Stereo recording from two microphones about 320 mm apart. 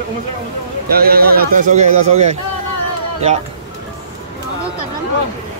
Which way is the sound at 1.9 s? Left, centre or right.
Right.